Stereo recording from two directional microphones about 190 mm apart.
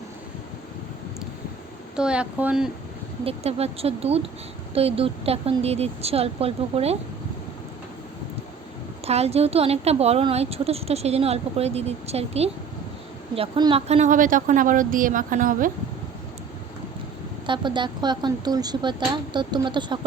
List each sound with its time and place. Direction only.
2.0 s speech: 5° right (ahead or behind)
3.2 s a woman's voice: 30° right (ahead or behind)
9.0 s a woman's voice: 35° right (ahead or behind)
17.4 s speech: 25° right (ahead or behind)